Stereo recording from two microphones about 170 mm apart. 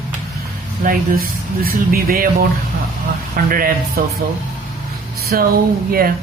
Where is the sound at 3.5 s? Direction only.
60° right (ahead or behind).